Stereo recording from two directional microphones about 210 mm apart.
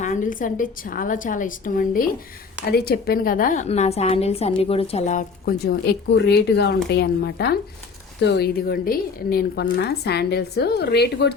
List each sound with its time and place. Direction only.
0.0 s a woman's voice: 35° left (ahead or behind); by 11.3 s 50° left (ahead or behind)